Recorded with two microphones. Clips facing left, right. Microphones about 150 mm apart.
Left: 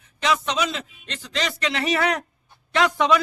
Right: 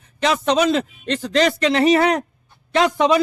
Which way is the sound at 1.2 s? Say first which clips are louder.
Right 10 dB; 50° right (ahead or behind).